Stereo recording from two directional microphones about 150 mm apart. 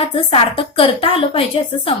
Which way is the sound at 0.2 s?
40° left (ahead or behind).